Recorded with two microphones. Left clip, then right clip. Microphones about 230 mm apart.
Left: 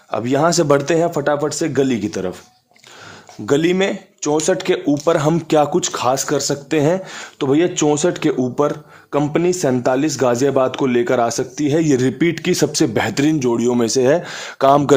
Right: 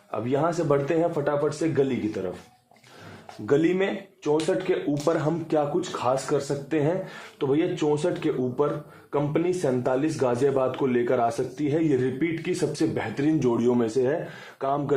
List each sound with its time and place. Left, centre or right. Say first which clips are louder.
0.1 s speech: left 9 dB; left
3.4 s speech: left 6 dB; left
13.4 s speech: left 6 dB; left